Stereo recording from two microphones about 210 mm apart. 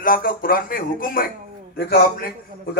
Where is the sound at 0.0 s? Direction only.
45° left (ahead or behind).